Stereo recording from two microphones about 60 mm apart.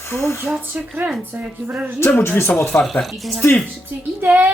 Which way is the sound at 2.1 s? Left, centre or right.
Left.